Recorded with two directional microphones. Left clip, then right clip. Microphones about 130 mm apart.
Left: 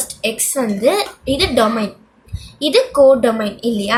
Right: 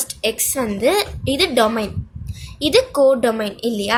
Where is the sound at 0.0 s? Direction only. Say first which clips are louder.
Left 1 dB; 45° right (ahead or behind).